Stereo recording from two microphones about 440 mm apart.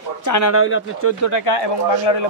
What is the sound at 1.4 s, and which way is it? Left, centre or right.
Speech, left.